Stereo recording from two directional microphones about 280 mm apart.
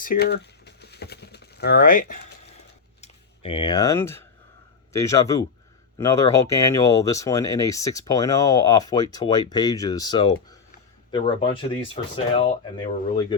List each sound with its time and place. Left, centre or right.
0.0 s a sound: left
3.0 s speech: centre
11.7 s speech: centre